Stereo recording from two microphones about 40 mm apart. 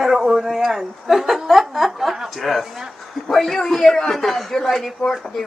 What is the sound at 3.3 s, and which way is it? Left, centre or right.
A man's voice, centre.